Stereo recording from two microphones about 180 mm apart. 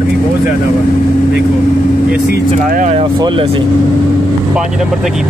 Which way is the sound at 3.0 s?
30° right (ahead or behind).